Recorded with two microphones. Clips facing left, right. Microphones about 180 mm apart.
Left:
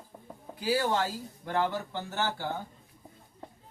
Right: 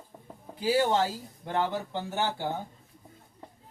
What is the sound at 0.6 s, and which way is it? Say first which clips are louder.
Speech: right 3 dB; 25° right (ahead or behind).